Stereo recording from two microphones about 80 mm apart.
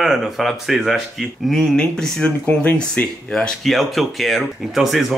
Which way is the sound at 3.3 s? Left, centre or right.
Centre.